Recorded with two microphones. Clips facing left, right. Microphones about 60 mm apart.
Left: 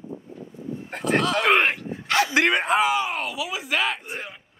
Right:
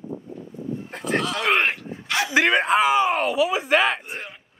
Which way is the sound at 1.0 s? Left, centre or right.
Left.